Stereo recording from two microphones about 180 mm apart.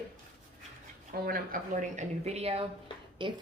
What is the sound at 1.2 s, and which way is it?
A woman's voice, 50° right (ahead or behind).